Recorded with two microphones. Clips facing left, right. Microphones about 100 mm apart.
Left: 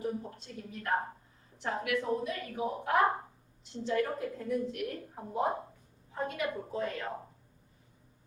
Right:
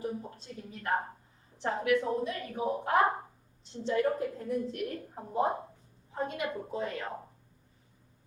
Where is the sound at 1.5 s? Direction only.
30° right (ahead or behind).